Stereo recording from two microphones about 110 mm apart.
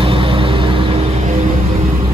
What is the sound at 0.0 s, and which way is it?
Music, 55° right (ahead or behind).